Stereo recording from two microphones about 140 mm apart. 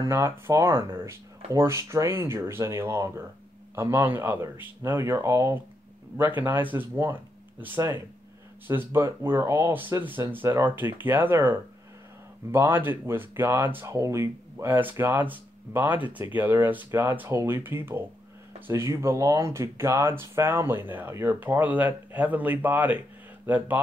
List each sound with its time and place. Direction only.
0.0 s speech: 20° right (ahead or behind)